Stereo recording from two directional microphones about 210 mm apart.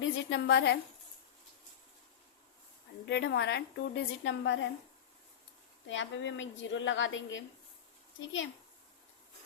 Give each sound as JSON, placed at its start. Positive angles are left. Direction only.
{"t": 0.0, "sound": "a woman's voice", "side_deg": 65}
{"t": 3.1, "sound": "a woman's voice", "side_deg": 55}
{"t": 5.9, "sound": "a woman's voice", "side_deg": 60}